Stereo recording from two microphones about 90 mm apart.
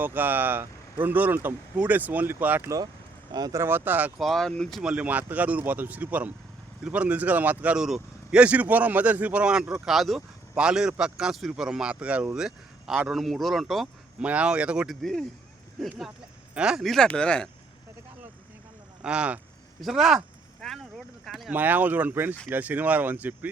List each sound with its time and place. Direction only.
0.0 s speech: 20° right (ahead or behind)
2.6 s speech: 40° right (ahead or behind)
3.6 s speech: 25° right (ahead or behind)
4.2 s speech: 5° left (ahead or behind)
4.8 s speech: 15° right (ahead or behind)
14.2 s speech: 15° right (ahead or behind)
15.0 s speech: 5° left (ahead or behind)
16.8 s speech: centre (ahead or behind)
19.0 s speech: 10° right (ahead or behind)
20.6 s a sound: 5° left (ahead or behind)
21.2 s speech: centre (ahead or behind)
21.5 s speech: 20° right (ahead or behind)